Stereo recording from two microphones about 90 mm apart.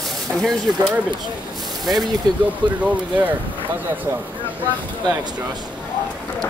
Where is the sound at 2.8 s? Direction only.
20° right (ahead or behind).